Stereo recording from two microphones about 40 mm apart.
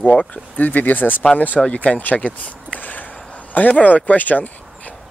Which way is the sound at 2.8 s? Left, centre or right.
Left.